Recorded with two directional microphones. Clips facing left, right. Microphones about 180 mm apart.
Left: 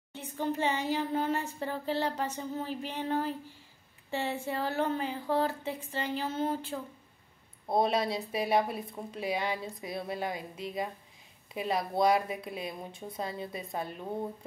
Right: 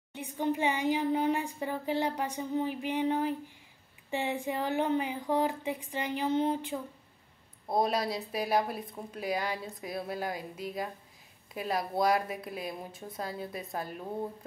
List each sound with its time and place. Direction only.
0.1 s speech: 15° right (ahead or behind)
7.6 s speech: centre (ahead or behind)